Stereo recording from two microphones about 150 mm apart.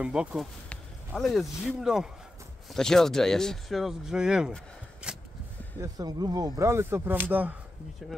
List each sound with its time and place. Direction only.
0.0 s speech: 5° right (ahead or behind)
5.0 s a sound: 5° right (ahead or behind)
5.8 s speech: 25° right (ahead or behind); by 8.2 s centre (ahead or behind)